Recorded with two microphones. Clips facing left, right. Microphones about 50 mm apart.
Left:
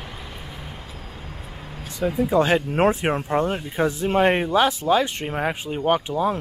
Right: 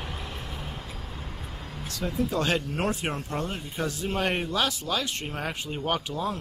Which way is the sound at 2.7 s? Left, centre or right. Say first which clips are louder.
Left 9 dB; left.